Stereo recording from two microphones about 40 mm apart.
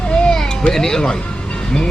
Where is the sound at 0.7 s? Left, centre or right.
Centre.